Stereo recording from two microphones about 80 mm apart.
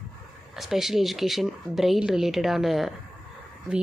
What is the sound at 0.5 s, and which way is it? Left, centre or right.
Speech, centre.